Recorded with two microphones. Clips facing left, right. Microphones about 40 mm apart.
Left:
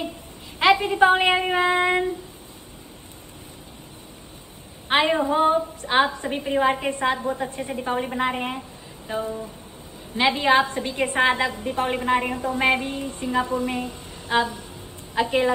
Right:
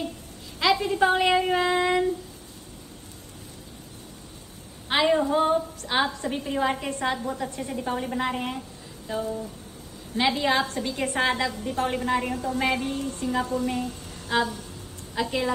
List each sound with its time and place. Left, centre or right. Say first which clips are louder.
0.6 s a woman's voice: left 5 dB; left
4.8 s a woman's voice: left 2 dB; left